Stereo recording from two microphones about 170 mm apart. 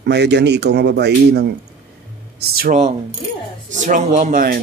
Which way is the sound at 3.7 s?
45° right (ahead or behind).